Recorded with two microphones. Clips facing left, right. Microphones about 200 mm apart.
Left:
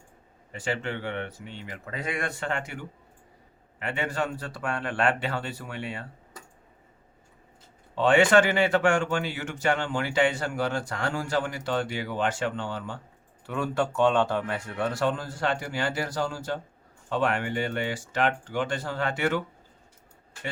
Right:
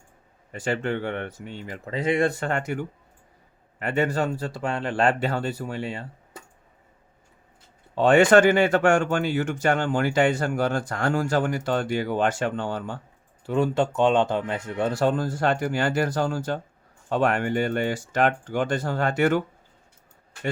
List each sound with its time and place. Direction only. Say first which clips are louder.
0.6 s speech: right 5 dB; 45° right (ahead or behind); by 2.3 s 25° right (ahead or behind)
2.4 s speech: right 5 dB; 45° right (ahead or behind); by 6.4 s 30° right (ahead or behind)
7.9 s speech: right 4 dB; 45° right (ahead or behind)
13.5 s speech: right 5 dB; 25° right (ahead or behind)
15.0 s speech: right 6 dB; 45° right (ahead or behind)